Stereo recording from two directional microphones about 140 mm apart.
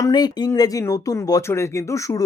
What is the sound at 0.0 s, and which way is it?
Speech, 30° left (ahead or behind).